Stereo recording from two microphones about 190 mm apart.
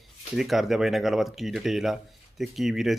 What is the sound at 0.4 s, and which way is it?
A man's voice, centre (ahead or behind).